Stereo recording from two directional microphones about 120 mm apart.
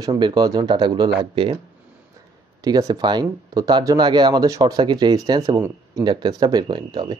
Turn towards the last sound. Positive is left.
turn(degrees=-35)  # may be behind; listen again after turning